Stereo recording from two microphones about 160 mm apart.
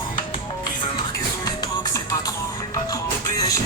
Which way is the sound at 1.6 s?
20° left (ahead or behind).